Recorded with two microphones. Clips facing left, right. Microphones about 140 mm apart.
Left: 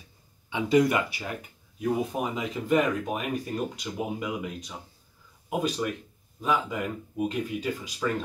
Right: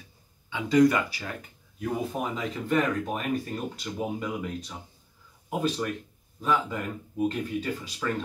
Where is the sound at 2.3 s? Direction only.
10° left (ahead or behind).